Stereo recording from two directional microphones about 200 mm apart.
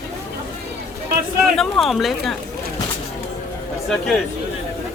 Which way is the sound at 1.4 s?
Centre (ahead or behind).